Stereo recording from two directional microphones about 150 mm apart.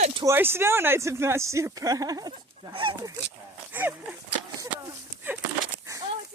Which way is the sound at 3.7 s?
15° right (ahead or behind).